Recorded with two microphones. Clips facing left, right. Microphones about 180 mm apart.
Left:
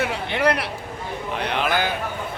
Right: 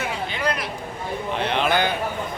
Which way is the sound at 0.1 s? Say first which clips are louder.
Left 4 dB; 70° left (ahead or behind).